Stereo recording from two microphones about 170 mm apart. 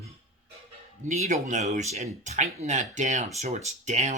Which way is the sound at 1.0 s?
45° right (ahead or behind).